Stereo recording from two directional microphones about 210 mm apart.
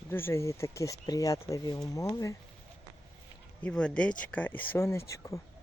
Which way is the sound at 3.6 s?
5° left (ahead or behind).